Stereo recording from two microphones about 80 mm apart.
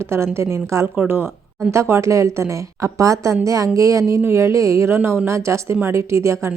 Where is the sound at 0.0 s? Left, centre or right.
Right.